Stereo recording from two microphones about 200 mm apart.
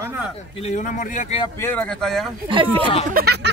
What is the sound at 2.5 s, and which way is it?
Speech, 25° right (ahead or behind).